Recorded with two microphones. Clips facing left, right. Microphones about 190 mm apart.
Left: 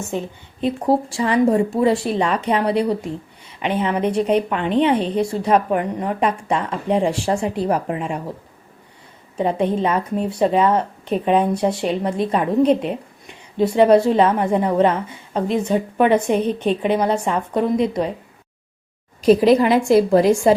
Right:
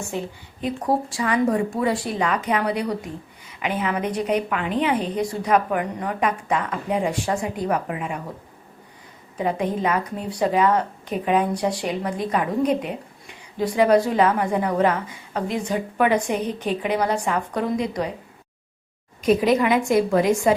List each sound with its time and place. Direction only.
0.6 s a woman's voice: 25° left (ahead or behind)
9.6 s a woman's voice: 25° left (ahead or behind)
19.2 s a woman's voice: 35° left (ahead or behind)